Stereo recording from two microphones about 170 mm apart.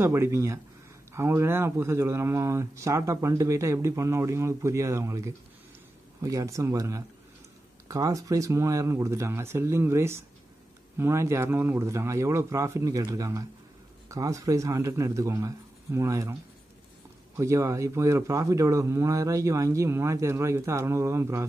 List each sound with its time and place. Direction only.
0.0 s a man's voice: 15° right (ahead or behind)
17.4 s speech: 20° right (ahead or behind)